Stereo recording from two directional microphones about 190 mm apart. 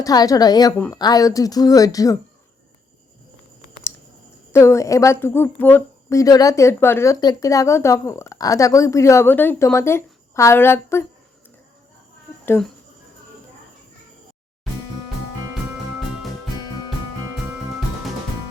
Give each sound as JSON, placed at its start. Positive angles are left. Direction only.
{"t": 0.0, "sound": "speech", "side_deg": 20}
{"t": 4.5, "sound": "a woman's voice", "side_deg": 15}
{"t": 12.5, "sound": "a woman's voice", "side_deg": 5}